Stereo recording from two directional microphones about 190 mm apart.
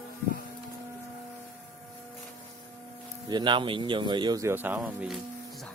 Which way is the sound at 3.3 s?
25° right (ahead or behind).